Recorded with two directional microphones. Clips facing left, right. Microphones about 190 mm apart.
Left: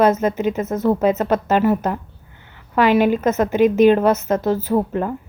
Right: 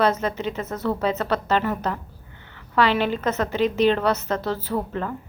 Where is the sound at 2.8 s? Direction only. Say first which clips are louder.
Left 10 dB; 10° left (ahead or behind).